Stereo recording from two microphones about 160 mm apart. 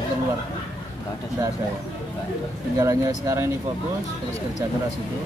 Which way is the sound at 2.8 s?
20° right (ahead or behind).